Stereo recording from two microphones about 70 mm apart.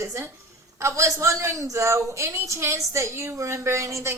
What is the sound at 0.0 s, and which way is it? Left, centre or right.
A woman's voice, right.